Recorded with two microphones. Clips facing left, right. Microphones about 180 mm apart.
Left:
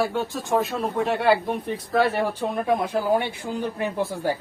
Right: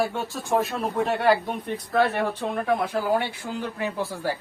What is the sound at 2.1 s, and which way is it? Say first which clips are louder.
Speech: left 1 dB; 10° left (ahead or behind).